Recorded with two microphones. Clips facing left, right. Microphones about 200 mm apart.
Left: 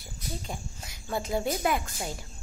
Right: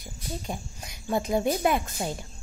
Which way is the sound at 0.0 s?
20° right (ahead or behind).